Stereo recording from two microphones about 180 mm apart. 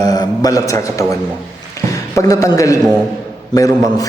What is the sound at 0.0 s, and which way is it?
A man's voice, 20° left (ahead or behind).